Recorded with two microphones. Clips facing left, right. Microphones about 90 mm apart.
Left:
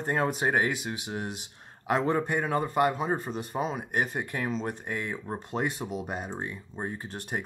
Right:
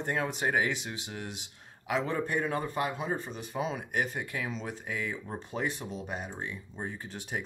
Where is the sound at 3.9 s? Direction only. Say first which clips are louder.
Left 3 dB; 40° left (ahead or behind).